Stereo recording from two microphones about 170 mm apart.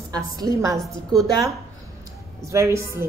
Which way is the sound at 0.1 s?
20° right (ahead or behind).